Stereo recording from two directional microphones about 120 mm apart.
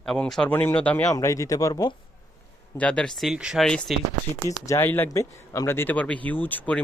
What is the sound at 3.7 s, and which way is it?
Speech, 5° left (ahead or behind).